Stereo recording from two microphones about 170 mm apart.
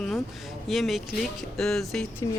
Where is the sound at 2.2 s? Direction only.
20° left (ahead or behind).